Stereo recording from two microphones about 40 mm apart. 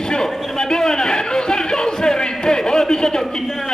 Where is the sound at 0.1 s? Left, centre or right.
Centre.